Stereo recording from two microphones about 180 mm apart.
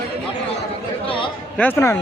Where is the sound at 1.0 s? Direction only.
30° left (ahead or behind).